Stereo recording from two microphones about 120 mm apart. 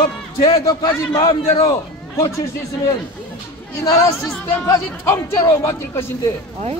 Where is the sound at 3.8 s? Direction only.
25° left (ahead or behind).